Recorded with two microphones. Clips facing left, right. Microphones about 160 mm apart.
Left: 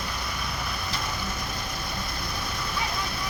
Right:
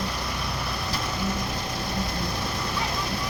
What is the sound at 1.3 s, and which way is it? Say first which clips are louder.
Vehicle: right 4 dB; 35° right (ahead or behind).